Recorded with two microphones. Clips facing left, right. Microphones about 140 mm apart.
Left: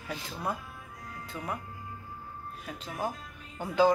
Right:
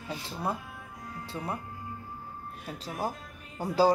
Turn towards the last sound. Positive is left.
turn(degrees=-35)  # may be behind; listen again after turning